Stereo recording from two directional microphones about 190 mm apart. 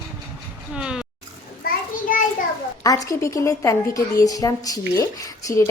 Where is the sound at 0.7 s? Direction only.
5° right (ahead or behind).